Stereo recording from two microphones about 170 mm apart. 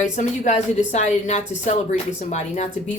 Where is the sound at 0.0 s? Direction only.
45° left (ahead or behind).